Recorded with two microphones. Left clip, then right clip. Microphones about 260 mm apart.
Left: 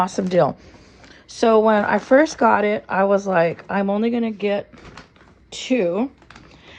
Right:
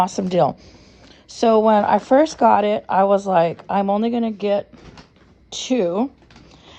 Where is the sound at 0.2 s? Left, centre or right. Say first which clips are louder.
Even; centre.